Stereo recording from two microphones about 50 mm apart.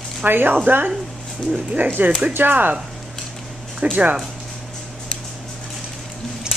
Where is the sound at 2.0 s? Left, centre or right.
Right.